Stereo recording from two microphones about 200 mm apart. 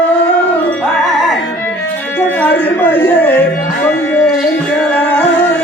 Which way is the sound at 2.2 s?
10° left (ahead or behind).